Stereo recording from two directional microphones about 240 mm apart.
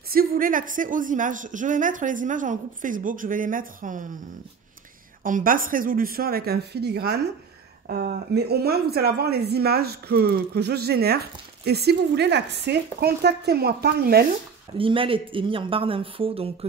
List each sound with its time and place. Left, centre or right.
0.1 s a woman's voice: right
5.2 s a woman's voice: right
14.8 s speech: right